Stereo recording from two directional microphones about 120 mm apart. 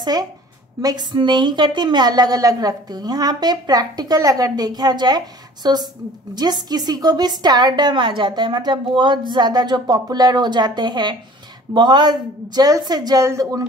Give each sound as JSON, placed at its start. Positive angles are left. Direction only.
{"t": 0.0, "sound": "a woman's voice", "side_deg": -35}